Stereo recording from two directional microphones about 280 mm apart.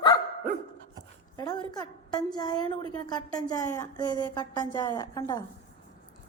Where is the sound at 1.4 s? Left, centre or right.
Centre.